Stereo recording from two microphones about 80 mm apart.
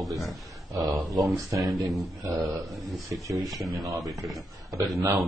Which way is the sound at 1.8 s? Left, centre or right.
Right.